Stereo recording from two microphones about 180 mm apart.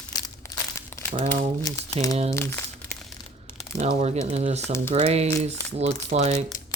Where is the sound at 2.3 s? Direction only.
15° left (ahead or behind).